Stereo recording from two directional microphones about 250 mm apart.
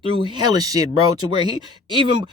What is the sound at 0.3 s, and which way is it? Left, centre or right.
Speech, centre.